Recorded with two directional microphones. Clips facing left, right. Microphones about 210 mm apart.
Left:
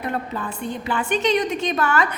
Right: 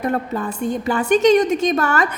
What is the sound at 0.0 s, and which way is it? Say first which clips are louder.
Speech: right 5 dB; 45° right (ahead or behind).